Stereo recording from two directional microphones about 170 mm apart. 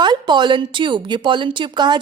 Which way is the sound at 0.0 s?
25° right (ahead or behind).